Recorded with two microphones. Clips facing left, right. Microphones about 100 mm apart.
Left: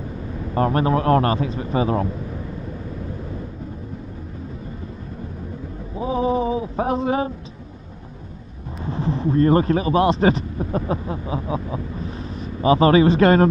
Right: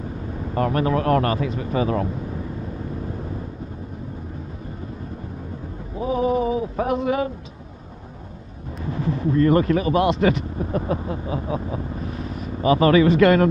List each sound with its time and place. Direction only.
0.6 s speech: 30° left (ahead or behind)
5.9 s a sound: 25° left (ahead or behind)
6.8 s speech: 30° left (ahead or behind)
8.8 s speech: 25° left (ahead or behind)